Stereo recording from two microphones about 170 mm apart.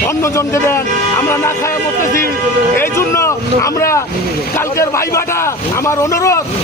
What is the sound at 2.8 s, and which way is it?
A man's voice, 15° left (ahead or behind).